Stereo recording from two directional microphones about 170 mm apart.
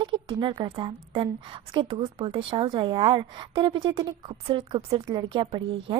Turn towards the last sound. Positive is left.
turn(degrees=-30)  # may be behind; listen again after turning